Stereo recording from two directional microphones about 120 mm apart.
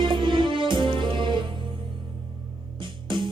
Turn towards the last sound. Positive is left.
turn(degrees=-45)  # may be behind; listen again after turning